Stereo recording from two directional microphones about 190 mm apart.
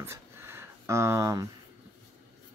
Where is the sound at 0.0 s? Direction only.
15° right (ahead or behind).